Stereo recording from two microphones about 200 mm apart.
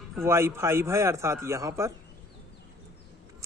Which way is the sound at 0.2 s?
15° right (ahead or behind).